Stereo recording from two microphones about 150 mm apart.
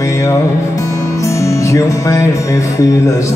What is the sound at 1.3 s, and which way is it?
Music, 20° left (ahead or behind).